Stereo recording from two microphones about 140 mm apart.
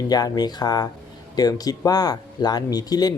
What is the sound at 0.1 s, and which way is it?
Speech, 30° left (ahead or behind).